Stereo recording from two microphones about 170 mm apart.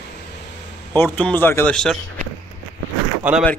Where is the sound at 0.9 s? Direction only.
10° left (ahead or behind).